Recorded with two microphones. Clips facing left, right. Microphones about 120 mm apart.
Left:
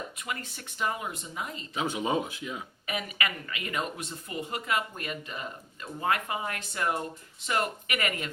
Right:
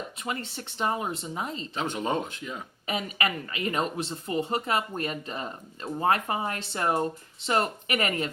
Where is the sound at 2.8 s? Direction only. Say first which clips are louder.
Right 4 dB; 30° right (ahead or behind).